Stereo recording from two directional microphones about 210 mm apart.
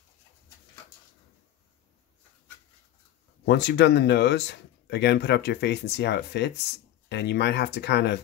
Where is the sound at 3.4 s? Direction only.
55° left (ahead or behind).